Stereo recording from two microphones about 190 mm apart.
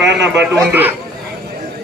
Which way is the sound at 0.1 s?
70° right (ahead or behind).